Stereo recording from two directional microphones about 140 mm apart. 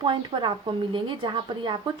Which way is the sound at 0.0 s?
35° right (ahead or behind).